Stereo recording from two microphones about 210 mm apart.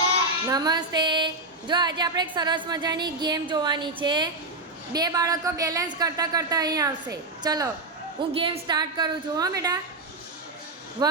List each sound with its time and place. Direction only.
0.4 s a woman's voice: 20° right (ahead or behind)
11.0 s a woman's voice: 20° right (ahead or behind)